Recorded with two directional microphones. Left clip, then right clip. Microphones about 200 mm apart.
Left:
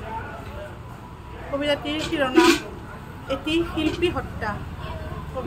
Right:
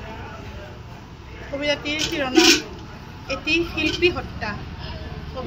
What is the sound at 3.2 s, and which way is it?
A woman's voice, 20° left (ahead or behind).